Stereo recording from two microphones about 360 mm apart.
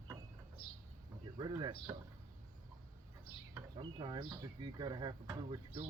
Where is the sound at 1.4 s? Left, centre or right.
Centre.